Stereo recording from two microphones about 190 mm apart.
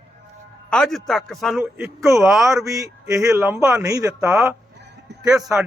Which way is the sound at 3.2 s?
10° right (ahead or behind).